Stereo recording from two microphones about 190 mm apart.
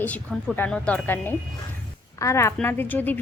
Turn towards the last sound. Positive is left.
turn(degrees=10)  # may be behind; listen again after turning